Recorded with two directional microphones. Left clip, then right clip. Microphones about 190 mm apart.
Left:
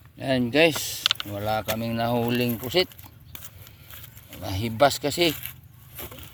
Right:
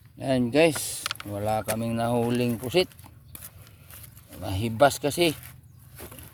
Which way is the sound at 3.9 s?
20° left (ahead or behind).